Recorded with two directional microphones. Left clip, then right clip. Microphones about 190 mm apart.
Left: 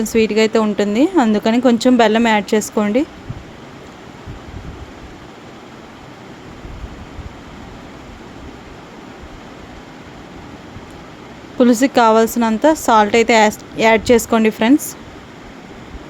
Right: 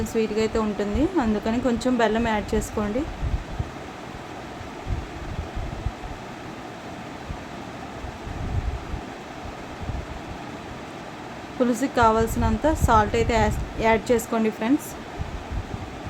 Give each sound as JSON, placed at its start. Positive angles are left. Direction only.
{"t": 0.0, "sound": "speech", "side_deg": 45}
{"t": 11.6, "sound": "speech", "side_deg": 45}